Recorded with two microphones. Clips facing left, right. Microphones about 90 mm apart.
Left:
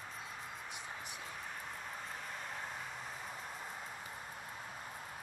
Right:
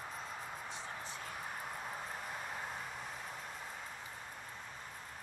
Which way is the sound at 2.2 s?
5° right (ahead or behind).